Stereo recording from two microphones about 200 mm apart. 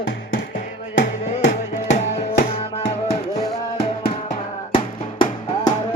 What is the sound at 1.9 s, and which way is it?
Music, 35° left (ahead or behind).